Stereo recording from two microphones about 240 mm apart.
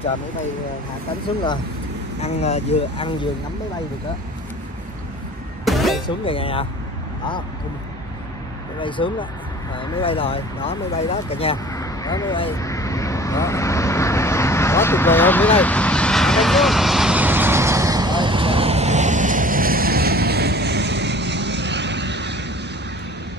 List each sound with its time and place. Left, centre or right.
2.2 s speech: left
5.7 s music: centre
6.0 s speech: left
8.8 s speech: left
12.4 s vehicle: centre; by 22.5 s right